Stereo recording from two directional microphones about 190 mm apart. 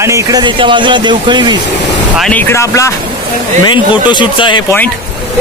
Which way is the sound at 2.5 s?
15° left (ahead or behind).